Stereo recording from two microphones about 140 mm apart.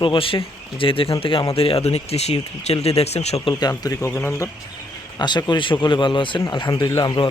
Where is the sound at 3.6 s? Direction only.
25° left (ahead or behind).